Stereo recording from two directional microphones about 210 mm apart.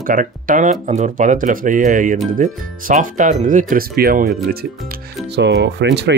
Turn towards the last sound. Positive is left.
turn(degrees=-55)  # may be behind; listen again after turning